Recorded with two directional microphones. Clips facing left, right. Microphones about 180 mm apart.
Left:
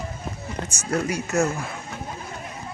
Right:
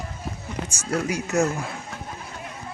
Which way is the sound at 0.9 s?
10° right (ahead or behind).